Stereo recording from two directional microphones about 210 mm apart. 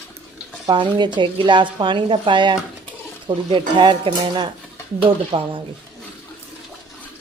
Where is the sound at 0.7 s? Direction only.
20° right (ahead or behind).